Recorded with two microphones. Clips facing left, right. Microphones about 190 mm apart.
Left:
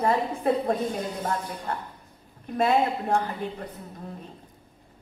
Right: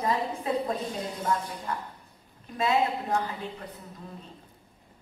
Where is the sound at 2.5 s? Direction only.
50° left (ahead or behind).